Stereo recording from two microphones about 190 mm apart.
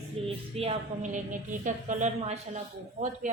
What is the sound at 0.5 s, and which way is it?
Speech, 35° right (ahead or behind).